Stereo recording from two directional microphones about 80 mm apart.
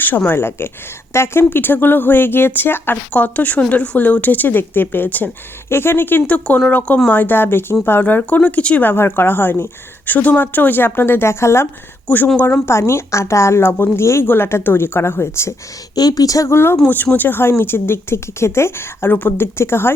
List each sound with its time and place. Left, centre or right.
0.3 s speech: left
8.9 s speech: left
12.0 s speech: left
12.6 s a woman's voice: left
16.0 s a woman's voice: left